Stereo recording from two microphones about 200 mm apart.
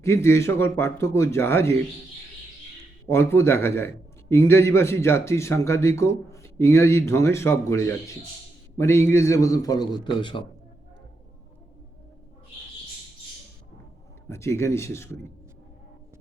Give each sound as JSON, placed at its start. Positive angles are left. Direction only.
{"t": 0.0, "sound": "a man's voice", "side_deg": 15}
{"t": 3.1, "sound": "a man's voice", "side_deg": 15}
{"t": 14.3, "sound": "a man's voice", "side_deg": 15}